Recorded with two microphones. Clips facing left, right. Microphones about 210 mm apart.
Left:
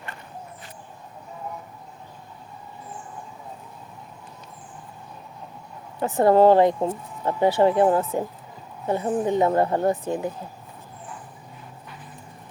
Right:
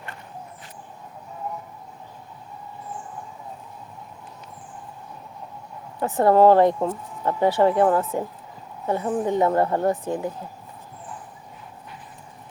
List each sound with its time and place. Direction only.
6.0 s speech: 25° left (ahead or behind)